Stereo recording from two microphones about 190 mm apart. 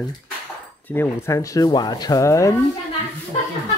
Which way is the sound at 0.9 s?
15° left (ahead or behind).